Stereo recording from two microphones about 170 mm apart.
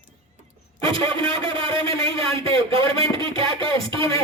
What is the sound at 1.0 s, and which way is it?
A man's voice, 30° right (ahead or behind).